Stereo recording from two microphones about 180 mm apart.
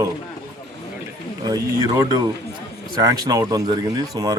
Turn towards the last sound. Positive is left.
turn(degrees=-20)  # may be behind; listen again after turning